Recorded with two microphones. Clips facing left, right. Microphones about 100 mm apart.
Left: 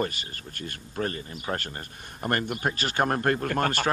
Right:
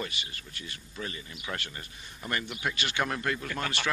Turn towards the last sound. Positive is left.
turn(degrees=50)  # may be behind; listen again after turning